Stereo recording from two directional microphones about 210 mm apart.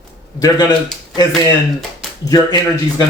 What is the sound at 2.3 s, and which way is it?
Speech, 20° left (ahead or behind).